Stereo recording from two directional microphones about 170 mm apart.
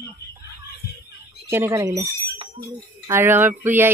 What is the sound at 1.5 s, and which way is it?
Speech, 15° right (ahead or behind).